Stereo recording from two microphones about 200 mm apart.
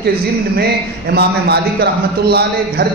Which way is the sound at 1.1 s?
55° right (ahead or behind).